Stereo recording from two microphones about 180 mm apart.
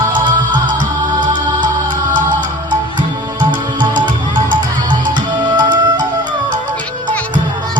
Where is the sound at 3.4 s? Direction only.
25° right (ahead or behind).